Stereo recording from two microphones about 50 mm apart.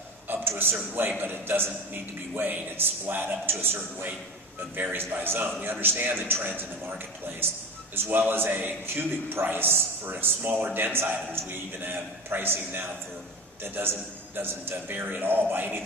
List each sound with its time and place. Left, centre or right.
0.4 s a sound: right
1.2 s a man's voice: right
7.9 s a man's voice: right
14.3 s a man's voice: right